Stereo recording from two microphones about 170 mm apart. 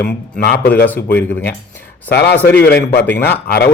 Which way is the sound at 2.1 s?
75° left (ahead or behind).